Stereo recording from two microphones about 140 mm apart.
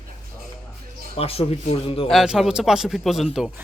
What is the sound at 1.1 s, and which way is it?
Speech, 45° left (ahead or behind).